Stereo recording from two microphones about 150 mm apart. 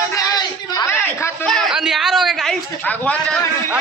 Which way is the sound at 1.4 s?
Centre (ahead or behind).